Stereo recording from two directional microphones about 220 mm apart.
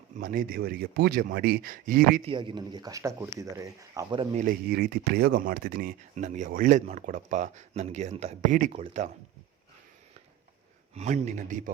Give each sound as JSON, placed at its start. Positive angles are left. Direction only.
{"t": 0.2, "sound": "speech", "side_deg": -40}
{"t": 2.2, "sound": "speech", "side_deg": -25}
{"t": 4.4, "sound": "speech", "side_deg": -40}
{"t": 10.9, "sound": "speech", "side_deg": -30}